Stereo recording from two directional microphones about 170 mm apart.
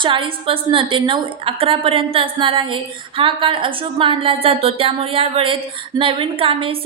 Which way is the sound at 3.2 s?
30° right (ahead or behind).